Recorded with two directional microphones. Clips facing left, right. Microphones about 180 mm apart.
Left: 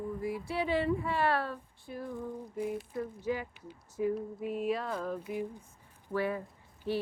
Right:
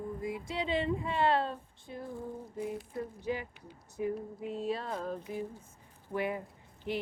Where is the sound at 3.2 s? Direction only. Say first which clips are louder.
Left 2 dB; 20° right (ahead or behind).